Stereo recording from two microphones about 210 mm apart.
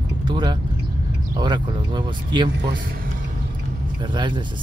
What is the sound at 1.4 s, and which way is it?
Speech, 20° right (ahead or behind).